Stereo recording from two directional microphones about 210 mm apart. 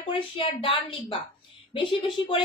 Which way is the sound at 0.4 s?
25° left (ahead or behind).